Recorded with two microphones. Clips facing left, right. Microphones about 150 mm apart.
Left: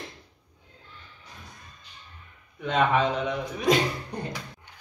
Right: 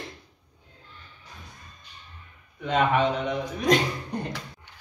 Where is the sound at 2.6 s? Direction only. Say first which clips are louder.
Right 1 dB; centre (ahead or behind).